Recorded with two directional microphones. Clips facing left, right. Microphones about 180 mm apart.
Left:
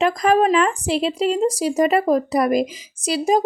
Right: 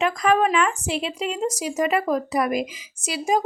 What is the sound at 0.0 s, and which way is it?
Speech, 35° left (ahead or behind).